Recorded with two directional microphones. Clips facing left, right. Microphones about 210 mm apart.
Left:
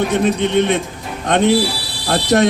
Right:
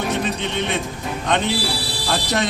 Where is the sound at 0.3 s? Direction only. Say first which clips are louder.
Left 9 dB; 55° left (ahead or behind).